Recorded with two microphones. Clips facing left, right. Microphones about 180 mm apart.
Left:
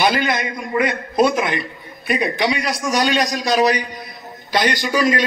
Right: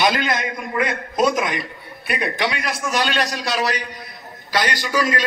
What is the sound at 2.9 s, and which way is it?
A man's voice, 15° left (ahead or behind).